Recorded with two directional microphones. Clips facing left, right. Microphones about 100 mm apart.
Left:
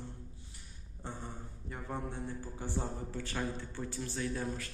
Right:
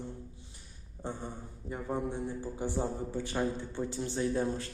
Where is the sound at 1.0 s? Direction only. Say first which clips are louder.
Right 5 dB; 20° right (ahead or behind).